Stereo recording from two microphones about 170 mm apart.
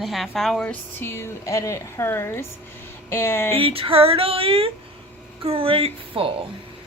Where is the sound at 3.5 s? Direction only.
35° right (ahead or behind).